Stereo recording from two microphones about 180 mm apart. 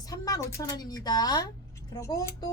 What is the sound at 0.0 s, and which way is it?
A woman's voice, 20° left (ahead or behind).